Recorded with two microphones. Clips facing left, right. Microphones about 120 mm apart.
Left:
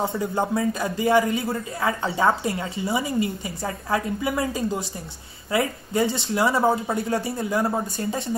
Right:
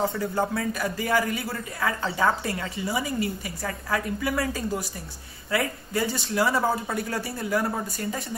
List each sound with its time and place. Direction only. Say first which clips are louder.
0.0 s a man's voice: left 1 dB; 25° left (ahead or behind)